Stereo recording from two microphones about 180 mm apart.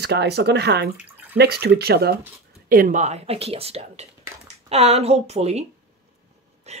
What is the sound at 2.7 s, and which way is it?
Speech, 50° right (ahead or behind).